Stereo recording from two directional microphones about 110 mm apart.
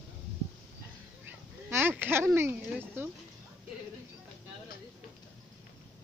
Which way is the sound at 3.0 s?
20° right (ahead or behind).